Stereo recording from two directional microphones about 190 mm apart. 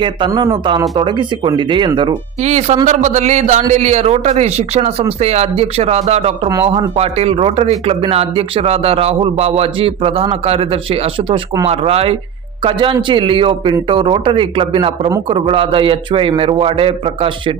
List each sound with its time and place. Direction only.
0.0 s a man's voice: 25° right (ahead or behind)
2.4 s a man's voice: 35° right (ahead or behind)